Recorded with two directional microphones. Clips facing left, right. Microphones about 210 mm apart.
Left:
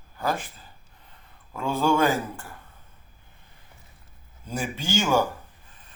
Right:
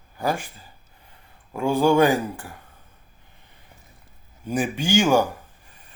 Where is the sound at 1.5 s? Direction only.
15° right (ahead or behind).